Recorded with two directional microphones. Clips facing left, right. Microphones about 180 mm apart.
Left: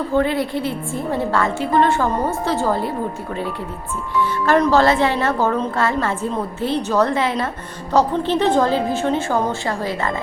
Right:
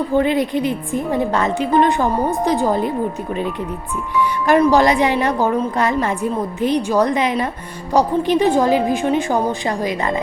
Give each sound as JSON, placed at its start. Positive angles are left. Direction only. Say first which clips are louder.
{"t": 0.1, "sound": "a woman's voice", "louder": "right 2 dB", "side_deg": -15}
{"t": 4.2, "sound": "a woman's voice", "louder": "right 2 dB", "side_deg": -10}